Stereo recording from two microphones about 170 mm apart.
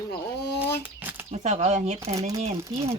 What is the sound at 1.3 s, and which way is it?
Speech, 40° right (ahead or behind).